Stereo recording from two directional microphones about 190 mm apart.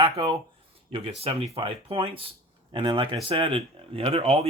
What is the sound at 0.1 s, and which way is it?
Speech, 30° right (ahead or behind).